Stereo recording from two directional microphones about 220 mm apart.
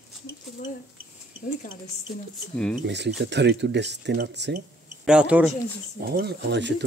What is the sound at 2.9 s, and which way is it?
Speech, 50° right (ahead or behind).